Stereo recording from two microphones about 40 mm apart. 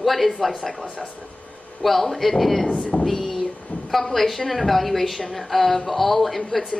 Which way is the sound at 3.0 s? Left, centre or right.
Centre.